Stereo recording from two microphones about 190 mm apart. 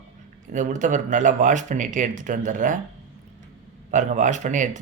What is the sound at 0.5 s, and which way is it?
Speech, 40° right (ahead or behind).